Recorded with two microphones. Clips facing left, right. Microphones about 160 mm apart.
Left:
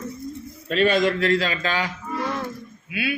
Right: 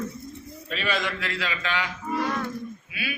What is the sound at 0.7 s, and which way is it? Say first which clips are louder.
A man's voice: left 10 dB; 40° left (ahead or behind).